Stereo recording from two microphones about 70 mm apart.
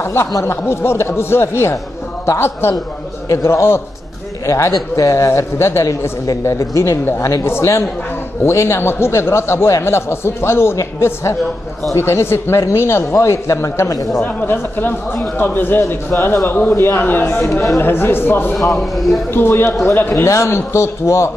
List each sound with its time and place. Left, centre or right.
0.0 s a man's voice: left
14.2 s speech: left
18.6 s speech: centre
19.3 s a man's voice: left